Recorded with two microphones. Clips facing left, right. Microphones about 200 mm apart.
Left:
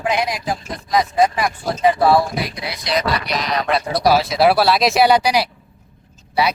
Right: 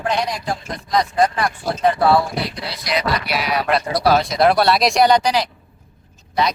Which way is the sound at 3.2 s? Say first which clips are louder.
Even; 10° right (ahead or behind).